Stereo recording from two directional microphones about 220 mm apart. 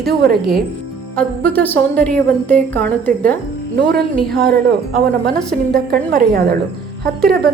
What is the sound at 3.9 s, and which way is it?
Speech, 45° right (ahead or behind).